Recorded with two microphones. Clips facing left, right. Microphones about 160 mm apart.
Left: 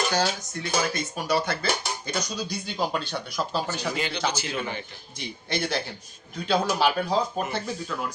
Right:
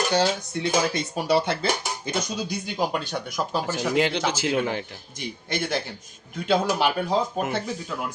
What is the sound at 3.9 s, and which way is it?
Speech, 90° right.